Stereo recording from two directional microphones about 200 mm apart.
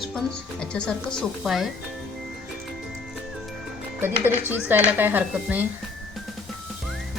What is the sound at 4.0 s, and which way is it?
Speech, 10° right (ahead or behind).